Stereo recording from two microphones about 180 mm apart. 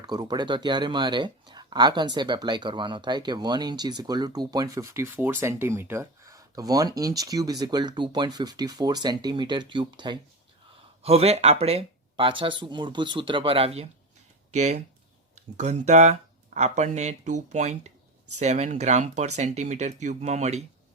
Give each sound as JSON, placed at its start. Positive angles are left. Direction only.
{"t": 0.0, "sound": "speech", "side_deg": -20}